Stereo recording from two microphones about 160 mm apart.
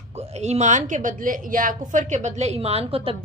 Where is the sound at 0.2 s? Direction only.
40° right (ahead or behind).